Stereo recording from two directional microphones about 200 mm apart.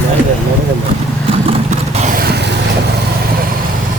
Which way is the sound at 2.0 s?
50° right (ahead or behind).